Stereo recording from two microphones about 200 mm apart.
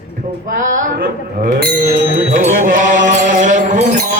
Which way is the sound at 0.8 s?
40° right (ahead or behind).